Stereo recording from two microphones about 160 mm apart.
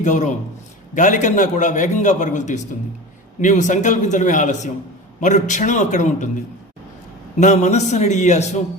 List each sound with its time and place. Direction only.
0.0 s a man's voice: 50° left (ahead or behind)
7.3 s a man's voice: 45° left (ahead or behind)